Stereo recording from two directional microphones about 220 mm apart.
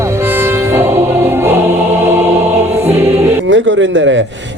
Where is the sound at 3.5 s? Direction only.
60° right (ahead or behind).